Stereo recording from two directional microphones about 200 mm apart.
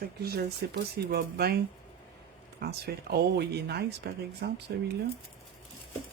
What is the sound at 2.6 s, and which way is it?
Speech, 50° right (ahead or behind).